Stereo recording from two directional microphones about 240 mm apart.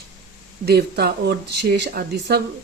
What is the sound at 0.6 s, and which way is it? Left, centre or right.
Speech, right.